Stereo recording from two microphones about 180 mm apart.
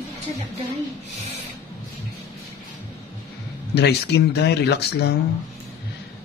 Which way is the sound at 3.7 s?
65° left (ahead or behind).